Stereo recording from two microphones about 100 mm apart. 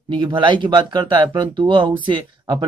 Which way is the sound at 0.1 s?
50° right (ahead or behind).